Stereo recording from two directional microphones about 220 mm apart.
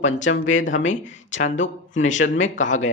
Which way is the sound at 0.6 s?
35° left (ahead or behind).